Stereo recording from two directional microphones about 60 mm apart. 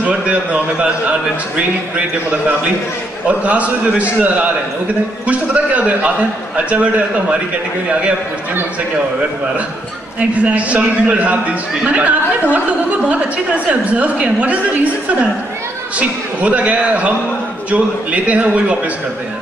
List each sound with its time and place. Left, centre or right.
0.0 s a man's voice: right
3.3 s a man's voice: right
10.3 s a man's voice: right
16.0 s a man's voice: right